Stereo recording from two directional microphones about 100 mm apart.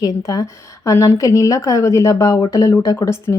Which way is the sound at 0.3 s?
35° left (ahead or behind).